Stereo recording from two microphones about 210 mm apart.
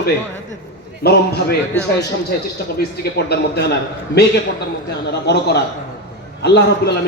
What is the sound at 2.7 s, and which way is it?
A man's voice, 50° left (ahead or behind).